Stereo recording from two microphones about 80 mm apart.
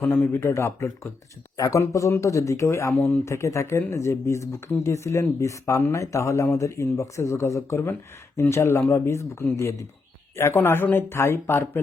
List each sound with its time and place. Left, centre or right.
0.0 s speech: left
1.5 s speech: left
3.2 s speech: left